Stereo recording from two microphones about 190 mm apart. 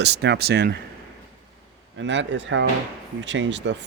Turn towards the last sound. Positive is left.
turn(degrees=-70)  # may be behind; listen again after turning